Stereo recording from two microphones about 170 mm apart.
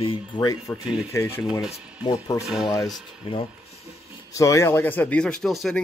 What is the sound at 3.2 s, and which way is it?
Speech, 30° left (ahead or behind).